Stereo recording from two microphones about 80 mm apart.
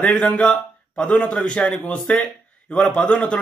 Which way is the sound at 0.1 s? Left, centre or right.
Centre.